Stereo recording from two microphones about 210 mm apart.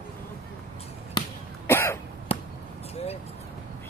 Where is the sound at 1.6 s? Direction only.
10° left (ahead or behind).